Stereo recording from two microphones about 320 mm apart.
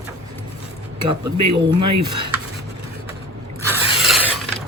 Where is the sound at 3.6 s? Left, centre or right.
Centre.